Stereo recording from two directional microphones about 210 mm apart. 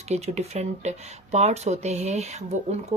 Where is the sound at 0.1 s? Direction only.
30° right (ahead or behind).